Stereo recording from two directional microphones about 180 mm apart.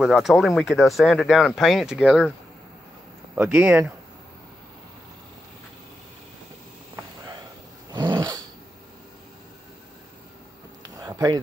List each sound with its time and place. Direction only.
0.0 s speech: centre (ahead or behind)
3.3 s speech: 10° right (ahead or behind)
7.9 s dog: 25° right (ahead or behind)
10.8 s a sound: 20° right (ahead or behind)